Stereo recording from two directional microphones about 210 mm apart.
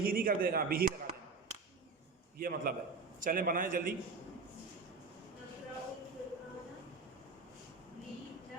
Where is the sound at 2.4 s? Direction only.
45° right (ahead or behind).